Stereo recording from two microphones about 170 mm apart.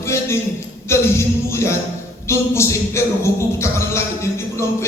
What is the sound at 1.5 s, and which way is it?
Speech, 15° left (ahead or behind).